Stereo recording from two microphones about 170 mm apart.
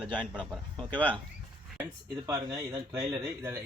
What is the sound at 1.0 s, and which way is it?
Speech, 10° left (ahead or behind).